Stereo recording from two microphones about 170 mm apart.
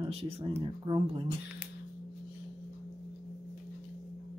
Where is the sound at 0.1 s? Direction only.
35° right (ahead or behind).